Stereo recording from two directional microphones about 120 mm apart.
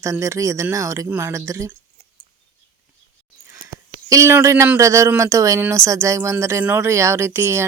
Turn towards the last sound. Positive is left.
turn(degrees=-20)  # may be behind; listen again after turning